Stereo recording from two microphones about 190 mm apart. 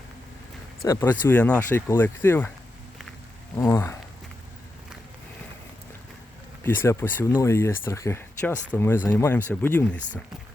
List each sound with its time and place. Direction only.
0.9 s speech: 15° left (ahead or behind)
3.5 s speech: 15° left (ahead or behind)
6.6 s speech: 15° left (ahead or behind)